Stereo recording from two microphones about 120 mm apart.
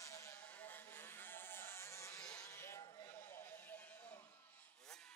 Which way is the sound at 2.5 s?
20° left (ahead or behind).